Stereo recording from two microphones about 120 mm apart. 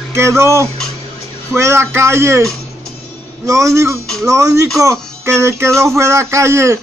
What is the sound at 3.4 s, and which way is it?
Speech, 25° right (ahead or behind).